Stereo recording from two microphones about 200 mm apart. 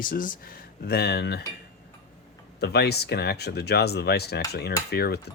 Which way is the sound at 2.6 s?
55° left (ahead or behind).